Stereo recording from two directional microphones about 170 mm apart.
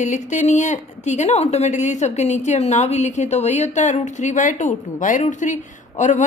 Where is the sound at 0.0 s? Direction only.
45° left (ahead or behind).